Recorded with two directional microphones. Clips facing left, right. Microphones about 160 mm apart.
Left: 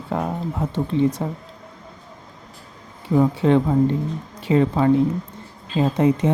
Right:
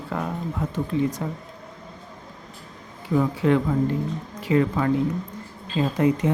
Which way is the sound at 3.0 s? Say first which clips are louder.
Left 3 dB; 30° left (ahead or behind).